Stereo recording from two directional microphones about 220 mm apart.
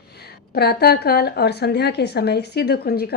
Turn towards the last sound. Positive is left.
turn(degrees=45)  # may be behind; listen again after turning